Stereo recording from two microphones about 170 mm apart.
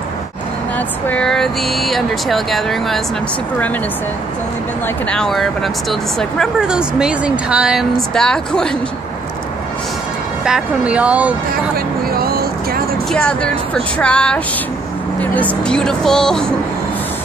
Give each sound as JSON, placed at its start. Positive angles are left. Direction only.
{"t": 0.7, "sound": "speech", "side_deg": 10}
{"t": 4.8, "sound": "speech", "side_deg": 5}
{"t": 10.4, "sound": "speech", "side_deg": -5}
{"t": 12.1, "sound": "vehicle", "side_deg": -60}
{"t": 13.1, "sound": "speech", "side_deg": 5}